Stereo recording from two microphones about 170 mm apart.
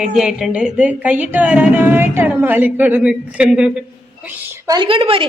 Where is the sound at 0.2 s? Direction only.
5° right (ahead or behind).